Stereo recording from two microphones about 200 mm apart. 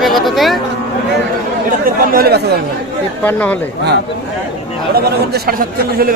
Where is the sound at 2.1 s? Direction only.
55° right (ahead or behind).